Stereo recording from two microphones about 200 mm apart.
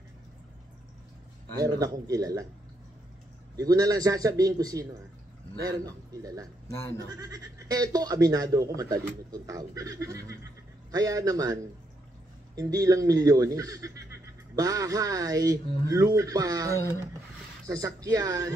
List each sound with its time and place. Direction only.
1.6 s speech: 15° right (ahead or behind)
3.5 s speech: 20° right (ahead or behind)